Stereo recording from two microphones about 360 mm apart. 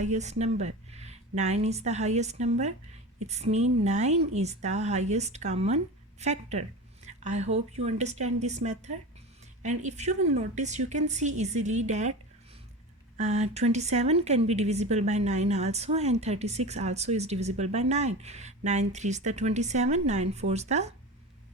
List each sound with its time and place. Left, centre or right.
0.0 s a woman's voice: centre
13.1 s a woman's voice: centre